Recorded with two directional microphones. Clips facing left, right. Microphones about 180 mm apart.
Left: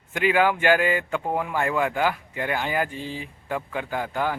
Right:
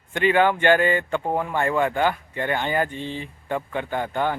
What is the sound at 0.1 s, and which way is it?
Speech, 5° left (ahead or behind).